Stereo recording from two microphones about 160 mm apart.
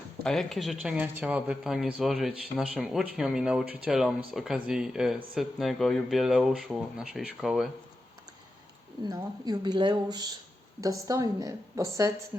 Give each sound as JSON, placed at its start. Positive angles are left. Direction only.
{"t": 0.2, "sound": "speech", "side_deg": 0}
{"t": 9.0, "sound": "a woman's voice", "side_deg": -25}